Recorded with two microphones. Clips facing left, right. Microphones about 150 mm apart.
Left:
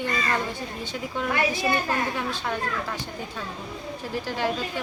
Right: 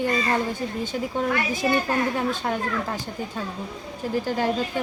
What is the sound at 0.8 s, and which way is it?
A woman's voice, 45° right (ahead or behind).